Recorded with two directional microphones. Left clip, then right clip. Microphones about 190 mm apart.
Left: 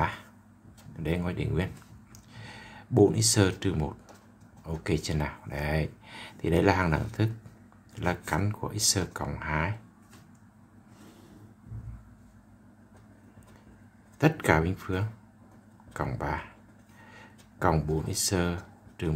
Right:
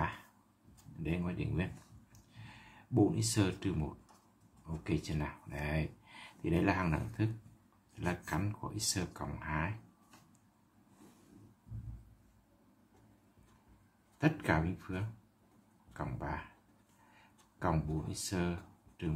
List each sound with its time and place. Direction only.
1.0 s speech: 25° left (ahead or behind)
2.3 s a sound: 25° left (ahead or behind)
4.8 s speech: 25° left (ahead or behind)
14.1 s speech: 25° left (ahead or behind)
17.6 s speech: 30° left (ahead or behind)